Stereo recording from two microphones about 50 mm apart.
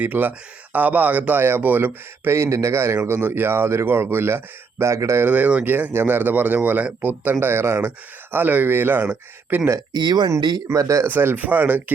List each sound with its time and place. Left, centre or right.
0.0 s speech: right
1.4 s speech: right
2.3 s speech: right
5.2 s speech: right
5.9 s speech: right
7.3 s speech: right
10.3 s speech: right
11.0 s speech: right
11.3 s speech: right